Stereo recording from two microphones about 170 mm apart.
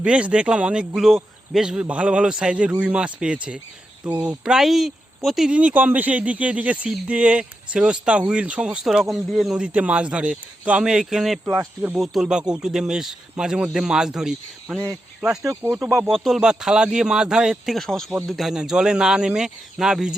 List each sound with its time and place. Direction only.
0.0 s speech: 5° right (ahead or behind)
11.4 s speech: 15° right (ahead or behind)
11.9 s speech: centre (ahead or behind)